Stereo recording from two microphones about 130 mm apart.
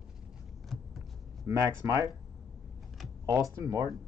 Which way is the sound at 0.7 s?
Centre (ahead or behind).